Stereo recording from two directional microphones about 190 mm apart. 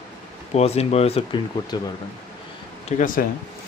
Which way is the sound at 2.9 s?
40° left (ahead or behind).